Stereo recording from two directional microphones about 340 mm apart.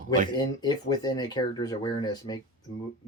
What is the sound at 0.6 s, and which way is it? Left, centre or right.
Speech, centre.